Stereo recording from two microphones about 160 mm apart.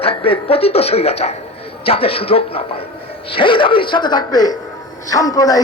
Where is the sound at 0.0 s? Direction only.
35° left (ahead or behind).